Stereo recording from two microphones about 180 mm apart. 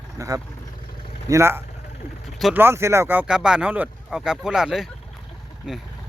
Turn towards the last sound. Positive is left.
turn(degrees=-5)  # may be behind; listen again after turning